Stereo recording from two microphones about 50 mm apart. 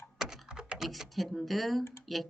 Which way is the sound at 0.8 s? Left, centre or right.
Centre.